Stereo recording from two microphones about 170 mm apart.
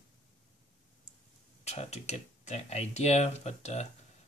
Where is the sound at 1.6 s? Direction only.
40° left (ahead or behind).